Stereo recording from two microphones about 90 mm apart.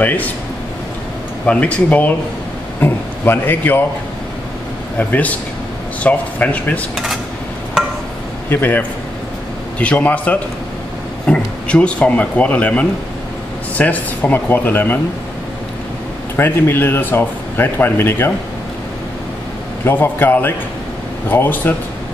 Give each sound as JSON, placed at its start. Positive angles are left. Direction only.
{"t": 0.0, "sound": "speech", "side_deg": 20}
{"t": 1.4, "sound": "speech", "side_deg": 15}
{"t": 4.9, "sound": "speech", "side_deg": 15}
{"t": 8.5, "sound": "speech", "side_deg": 20}
{"t": 16.3, "sound": "speech", "side_deg": 25}
{"t": 19.8, "sound": "speech", "side_deg": 25}